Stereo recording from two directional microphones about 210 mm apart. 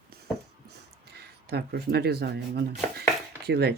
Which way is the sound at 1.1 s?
50° right (ahead or behind).